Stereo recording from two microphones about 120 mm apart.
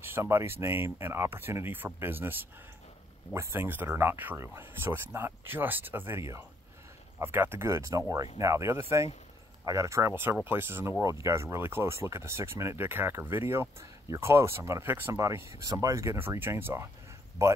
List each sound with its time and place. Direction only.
0.0 s speech: 20° right (ahead or behind)
3.3 s speech: 20° right (ahead or behind)